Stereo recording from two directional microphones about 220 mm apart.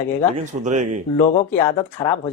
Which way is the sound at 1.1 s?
15° left (ahead or behind).